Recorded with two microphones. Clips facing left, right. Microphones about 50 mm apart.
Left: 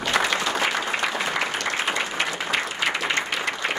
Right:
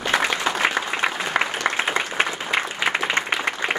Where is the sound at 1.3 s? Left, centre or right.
Right.